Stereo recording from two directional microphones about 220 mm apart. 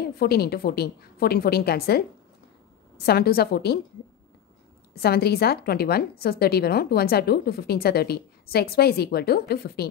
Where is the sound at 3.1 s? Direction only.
45° left (ahead or behind).